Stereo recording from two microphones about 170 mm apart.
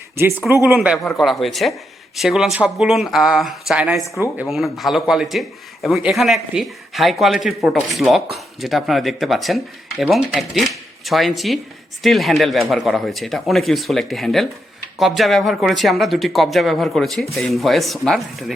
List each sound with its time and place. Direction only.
0.2 s a man's voice: 15° right (ahead or behind)